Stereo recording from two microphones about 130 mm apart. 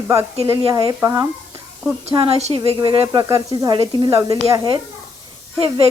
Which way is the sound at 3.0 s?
25° right (ahead or behind).